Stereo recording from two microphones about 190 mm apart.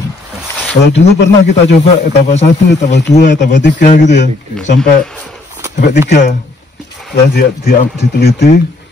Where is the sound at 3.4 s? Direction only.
70° left (ahead or behind).